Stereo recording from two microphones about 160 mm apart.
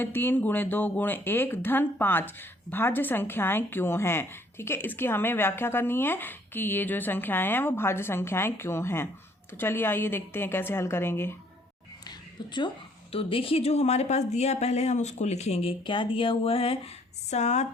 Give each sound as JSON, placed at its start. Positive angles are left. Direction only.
{"t": 0.0, "sound": "speech", "side_deg": 15}
{"t": 12.5, "sound": "a woman's voice", "side_deg": 30}